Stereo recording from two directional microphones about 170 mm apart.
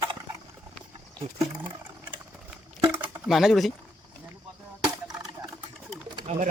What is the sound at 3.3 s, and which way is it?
Speech, centre (ahead or behind).